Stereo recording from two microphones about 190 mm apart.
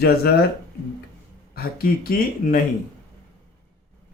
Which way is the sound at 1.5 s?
50° left (ahead or behind).